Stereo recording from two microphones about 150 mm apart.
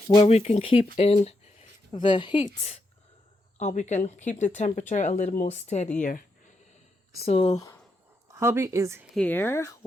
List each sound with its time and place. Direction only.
0.3 s a woman's voice: 50° left (ahead or behind)
3.6 s speech: 50° left (ahead or behind)
6.0 s a sound: 60° left (ahead or behind)
7.3 s a woman's voice: 40° left (ahead or behind)
7.5 s speech: 20° left (ahead or behind)
8.3 s speech: 20° right (ahead or behind)
9.1 s speech: 10° left (ahead or behind)